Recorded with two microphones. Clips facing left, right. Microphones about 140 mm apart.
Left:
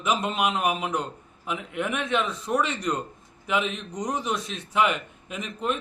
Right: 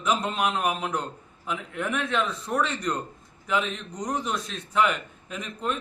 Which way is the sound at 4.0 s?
Centre (ahead or behind).